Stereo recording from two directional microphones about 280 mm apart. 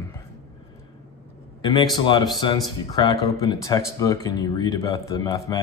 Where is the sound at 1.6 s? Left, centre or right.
Centre.